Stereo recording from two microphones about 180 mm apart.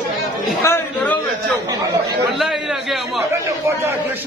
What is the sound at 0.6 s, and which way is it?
Speech, 15° left (ahead or behind).